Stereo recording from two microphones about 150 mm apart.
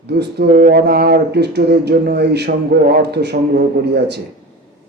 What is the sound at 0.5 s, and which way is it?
Speech, 65° right (ahead or behind).